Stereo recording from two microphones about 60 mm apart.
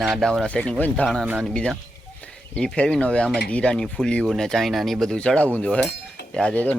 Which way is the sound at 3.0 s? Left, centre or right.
Centre.